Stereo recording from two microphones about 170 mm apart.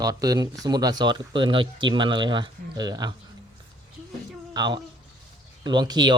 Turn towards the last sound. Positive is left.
turn(degrees=-25)  # may be behind; listen again after turning